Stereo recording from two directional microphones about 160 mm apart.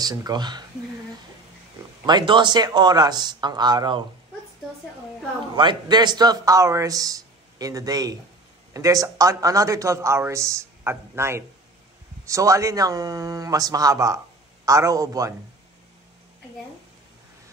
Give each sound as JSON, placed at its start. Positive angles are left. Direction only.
{"t": 0.0, "sound": "a man's voice", "side_deg": -25}
{"t": 2.0, "sound": "a man's voice", "side_deg": -30}
{"t": 5.6, "sound": "a man's voice", "side_deg": -30}